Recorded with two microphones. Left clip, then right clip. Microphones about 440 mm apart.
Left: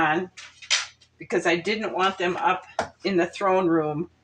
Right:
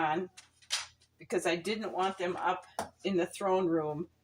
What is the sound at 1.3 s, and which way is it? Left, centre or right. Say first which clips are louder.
Speech: left 9 dB; right.